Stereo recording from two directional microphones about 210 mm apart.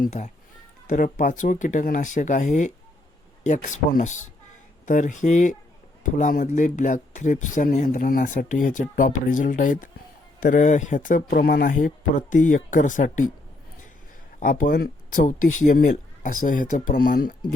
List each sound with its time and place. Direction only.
0.0 s speech: 35° left (ahead or behind)
14.3 s speech: 40° left (ahead or behind)